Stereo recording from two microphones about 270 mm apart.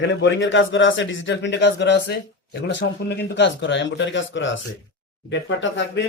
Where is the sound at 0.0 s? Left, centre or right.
Left.